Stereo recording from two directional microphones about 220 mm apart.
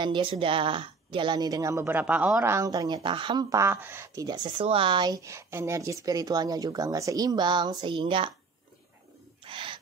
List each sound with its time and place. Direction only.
0.0 s a woman's voice: 20° right (ahead or behind)
9.4 s owl: 25° right (ahead or behind)